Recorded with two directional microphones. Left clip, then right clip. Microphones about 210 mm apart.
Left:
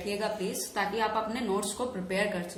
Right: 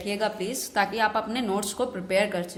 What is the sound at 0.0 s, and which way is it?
A woman's voice, 45° right (ahead or behind).